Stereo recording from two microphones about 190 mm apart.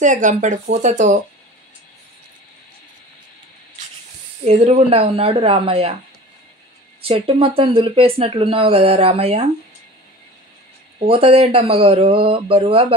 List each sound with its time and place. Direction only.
0.0 s speech: 40° right (ahead or behind)
4.5 s speech: 35° right (ahead or behind)
7.1 s speech: 30° right (ahead or behind)
11.1 s speech: 30° right (ahead or behind)